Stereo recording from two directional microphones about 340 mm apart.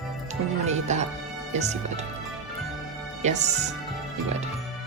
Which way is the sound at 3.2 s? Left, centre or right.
Centre.